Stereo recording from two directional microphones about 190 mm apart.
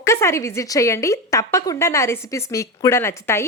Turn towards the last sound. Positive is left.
turn(degrees=15)  # may be behind; listen again after turning